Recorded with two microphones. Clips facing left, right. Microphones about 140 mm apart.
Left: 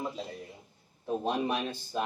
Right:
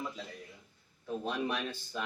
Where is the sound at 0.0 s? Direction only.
35° left (ahead or behind).